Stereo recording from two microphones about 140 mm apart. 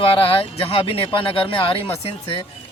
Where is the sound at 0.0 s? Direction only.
40° left (ahead or behind).